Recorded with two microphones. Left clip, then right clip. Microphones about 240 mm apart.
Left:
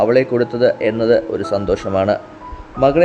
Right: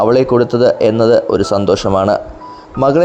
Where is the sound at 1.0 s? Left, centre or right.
Centre.